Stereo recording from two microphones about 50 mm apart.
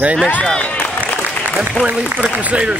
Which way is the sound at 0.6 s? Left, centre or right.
Left.